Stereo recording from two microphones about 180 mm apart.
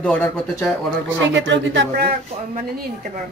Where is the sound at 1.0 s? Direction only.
90° right.